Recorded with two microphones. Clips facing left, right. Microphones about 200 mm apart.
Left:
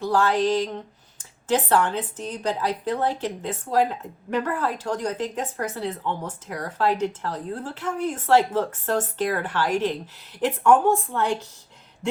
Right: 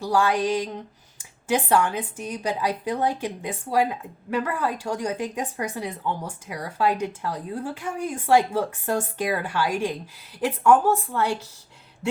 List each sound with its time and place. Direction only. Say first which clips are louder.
0.0 s speech: left 1 dB; 10° right (ahead or behind)